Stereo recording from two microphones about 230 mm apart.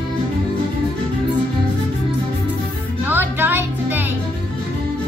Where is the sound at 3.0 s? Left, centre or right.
Centre.